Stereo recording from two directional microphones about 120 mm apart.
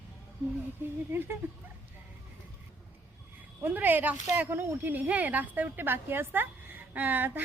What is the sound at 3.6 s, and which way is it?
A woman's voice, 15° right (ahead or behind).